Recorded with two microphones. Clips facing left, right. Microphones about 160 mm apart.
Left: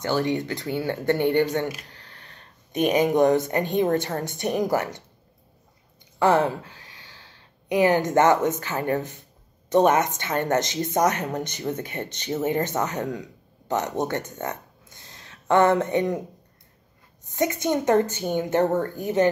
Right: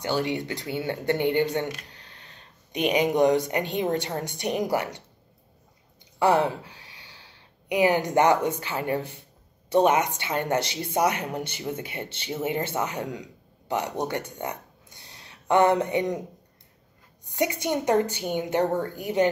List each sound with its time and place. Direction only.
0.0 s speech: 15° right (ahead or behind)
1.9 s a sound: 20° right (ahead or behind)
2.7 s speech: 45° left (ahead or behind)
3.0 s speech: 15° right (ahead or behind)
6.1 s a sound: 15° right (ahead or behind)
8.5 s speech: 15° right (ahead or behind)
17.2 s speech: 15° right (ahead or behind)